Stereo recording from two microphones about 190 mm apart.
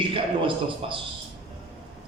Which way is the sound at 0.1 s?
25° right (ahead or behind).